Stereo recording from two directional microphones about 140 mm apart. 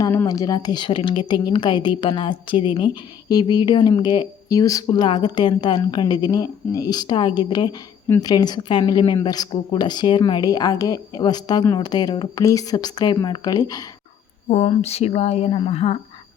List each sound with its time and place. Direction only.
0.0 s a woman's voice: 20° left (ahead or behind)
14.6 s speech: 45° left (ahead or behind)